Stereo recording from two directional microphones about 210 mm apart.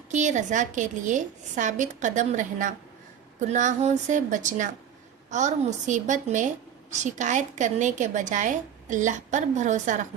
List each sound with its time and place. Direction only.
0.1 s a woman's voice: 35° right (ahead or behind)